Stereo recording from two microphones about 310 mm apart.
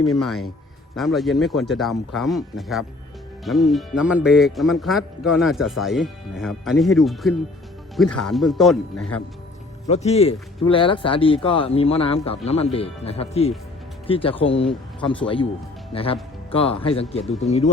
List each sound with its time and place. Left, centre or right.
0.1 s speech: centre
9.8 s a man's voice: left